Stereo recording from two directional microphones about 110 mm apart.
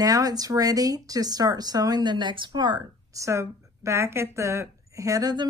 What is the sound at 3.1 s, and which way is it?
A woman's voice, 25° right (ahead or behind).